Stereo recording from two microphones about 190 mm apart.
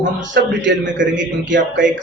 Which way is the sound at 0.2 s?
75° right (ahead or behind).